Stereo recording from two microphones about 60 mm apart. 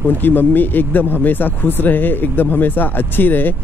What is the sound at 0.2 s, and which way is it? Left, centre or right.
Speech, left.